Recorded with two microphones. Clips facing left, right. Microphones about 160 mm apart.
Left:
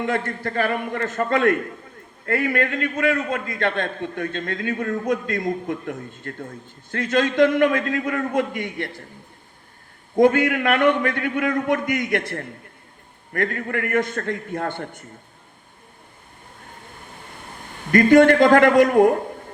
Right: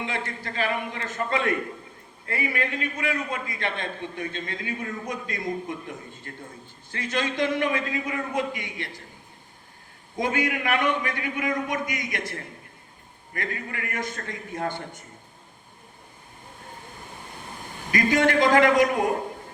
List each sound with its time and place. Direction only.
0.0 s a man's voice: 55° left (ahead or behind)
10.2 s a man's voice: 55° left (ahead or behind)
17.9 s a man's voice: 55° left (ahead or behind)